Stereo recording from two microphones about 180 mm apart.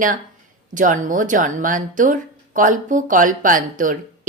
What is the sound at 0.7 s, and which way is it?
Speech, 45° right (ahead or behind).